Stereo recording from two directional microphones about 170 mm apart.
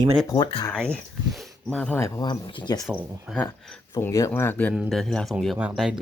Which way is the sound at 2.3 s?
30° left (ahead or behind).